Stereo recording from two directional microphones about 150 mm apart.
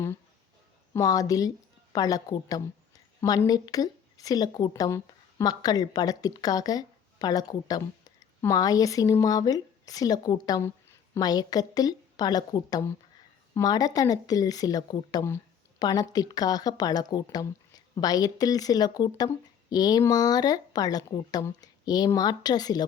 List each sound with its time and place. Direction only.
0.9 s a woman's voice: 25° left (ahead or behind)